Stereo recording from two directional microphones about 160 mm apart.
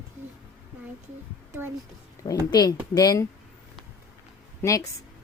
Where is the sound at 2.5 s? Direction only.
25° left (ahead or behind).